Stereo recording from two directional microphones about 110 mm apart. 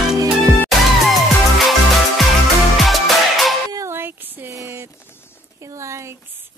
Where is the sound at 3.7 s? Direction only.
30° right (ahead or behind).